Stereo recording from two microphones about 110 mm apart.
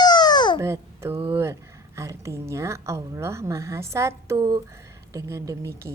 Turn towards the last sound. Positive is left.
turn(degrees=-25)  # may be behind; listen again after turning